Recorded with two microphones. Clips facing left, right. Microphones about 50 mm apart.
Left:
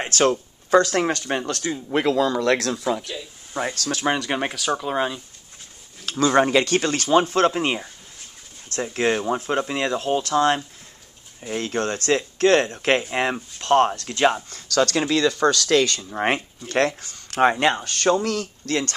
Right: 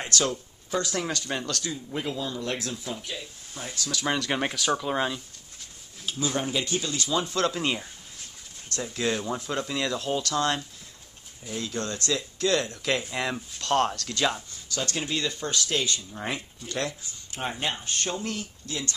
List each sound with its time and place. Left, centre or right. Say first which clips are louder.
0.2 s speech: left 9 dB; left
1.7 s speech: left 10 dB; left
3.7 s speech: left 5 dB; left
4.2 s speech: left 2 dB; centre
6.0 s speech: left 11 dB; left
8.9 s speech: left 7 dB; left
11.4 s speech: left 7 dB; left
13.6 s speech: left 7 dB; left
14.5 s speech: left 11 dB; left
16.1 s speech: left 10 dB; left